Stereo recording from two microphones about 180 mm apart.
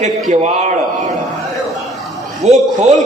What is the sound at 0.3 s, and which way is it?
Speech, 40° right (ahead or behind).